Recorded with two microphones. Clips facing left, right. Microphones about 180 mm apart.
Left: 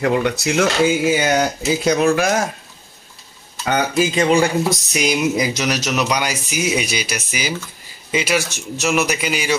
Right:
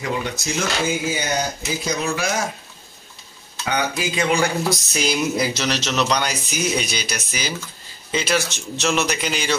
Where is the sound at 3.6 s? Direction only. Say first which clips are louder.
Left 5 dB; 40° left (ahead or behind).